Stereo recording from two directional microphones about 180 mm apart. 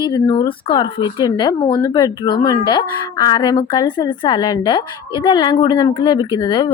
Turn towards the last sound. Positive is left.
turn(degrees=25)  # may be behind; listen again after turning